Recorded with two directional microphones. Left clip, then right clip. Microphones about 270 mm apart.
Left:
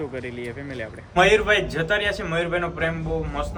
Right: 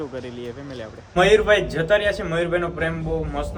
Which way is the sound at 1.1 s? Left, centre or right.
Centre.